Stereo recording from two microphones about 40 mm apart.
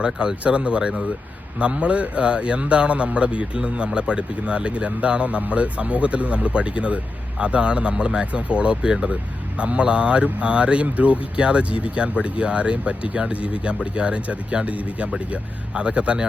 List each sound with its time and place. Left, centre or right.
0.0 s a man's voice: right